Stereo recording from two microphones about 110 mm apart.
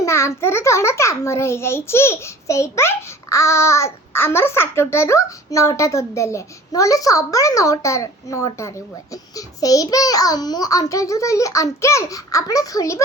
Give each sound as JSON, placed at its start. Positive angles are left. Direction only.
{"t": 0.0, "sound": "a child's voice", "side_deg": 25}